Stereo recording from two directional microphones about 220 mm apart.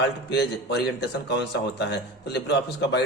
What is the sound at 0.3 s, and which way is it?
A man's voice, 50° left (ahead or behind).